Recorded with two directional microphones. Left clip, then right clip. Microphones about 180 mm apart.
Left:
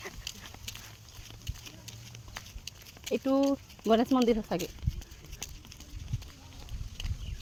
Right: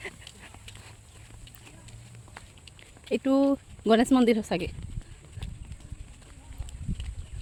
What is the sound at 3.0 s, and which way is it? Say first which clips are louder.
Speech: right 3 dB; 30° right (ahead or behind).